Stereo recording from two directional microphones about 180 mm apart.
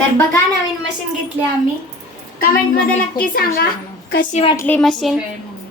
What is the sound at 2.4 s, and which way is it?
A woman's voice, 55° left (ahead or behind).